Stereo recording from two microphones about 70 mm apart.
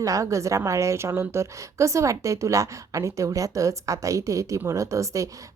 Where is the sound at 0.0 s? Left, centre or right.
Right.